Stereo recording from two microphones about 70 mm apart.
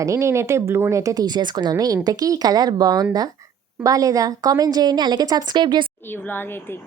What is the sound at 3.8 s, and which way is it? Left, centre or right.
A woman's voice, right.